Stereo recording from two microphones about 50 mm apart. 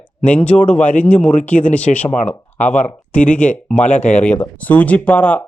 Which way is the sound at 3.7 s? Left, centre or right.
Left.